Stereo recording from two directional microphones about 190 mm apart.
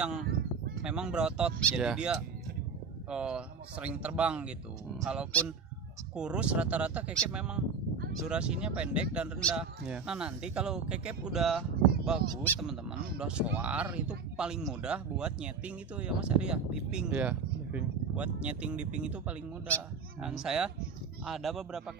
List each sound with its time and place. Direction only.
0.0 s speech: 5° right (ahead or behind)